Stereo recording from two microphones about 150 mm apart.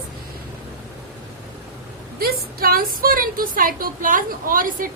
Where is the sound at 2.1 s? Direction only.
80° right.